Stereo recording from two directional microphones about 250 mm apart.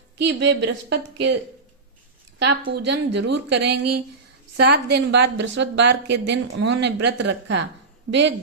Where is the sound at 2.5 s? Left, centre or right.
Right.